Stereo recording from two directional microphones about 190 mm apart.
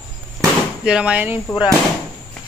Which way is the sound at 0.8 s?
5° right (ahead or behind).